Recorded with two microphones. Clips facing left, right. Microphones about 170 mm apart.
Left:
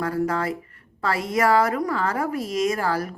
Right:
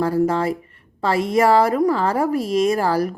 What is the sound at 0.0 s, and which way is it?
A woman's voice, 30° right (ahead or behind).